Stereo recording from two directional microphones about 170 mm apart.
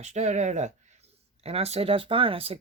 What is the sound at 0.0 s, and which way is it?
Speech, 40° right (ahead or behind).